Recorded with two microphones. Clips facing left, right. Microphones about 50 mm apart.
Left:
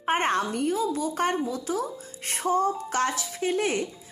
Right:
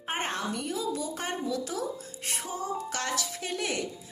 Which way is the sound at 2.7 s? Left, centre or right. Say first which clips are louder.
Left 5 dB; left.